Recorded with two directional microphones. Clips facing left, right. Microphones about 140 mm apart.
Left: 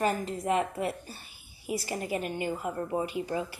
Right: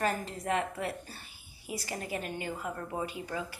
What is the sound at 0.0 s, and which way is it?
A woman's voice, 15° left (ahead or behind).